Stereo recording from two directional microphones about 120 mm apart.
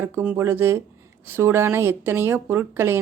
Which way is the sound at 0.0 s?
10° right (ahead or behind).